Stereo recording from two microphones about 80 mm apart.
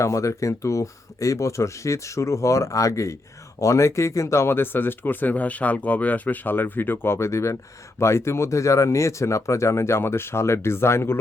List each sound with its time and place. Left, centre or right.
0.0 s speech: left